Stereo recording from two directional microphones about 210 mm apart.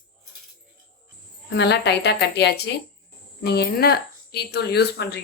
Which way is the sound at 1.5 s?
55° left (ahead or behind).